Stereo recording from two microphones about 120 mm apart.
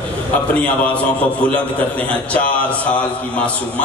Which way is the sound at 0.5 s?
10° left (ahead or behind).